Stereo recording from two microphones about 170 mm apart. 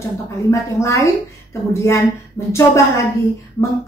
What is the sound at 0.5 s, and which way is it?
A woman's voice, 15° left (ahead or behind).